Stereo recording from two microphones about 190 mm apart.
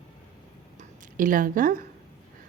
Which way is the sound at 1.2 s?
45° right (ahead or behind).